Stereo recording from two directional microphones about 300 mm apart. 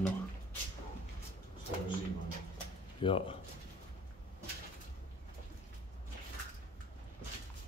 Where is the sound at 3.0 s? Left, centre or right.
Centre.